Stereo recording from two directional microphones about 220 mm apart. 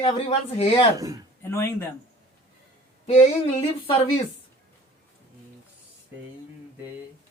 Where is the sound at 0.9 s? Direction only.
15° right (ahead or behind).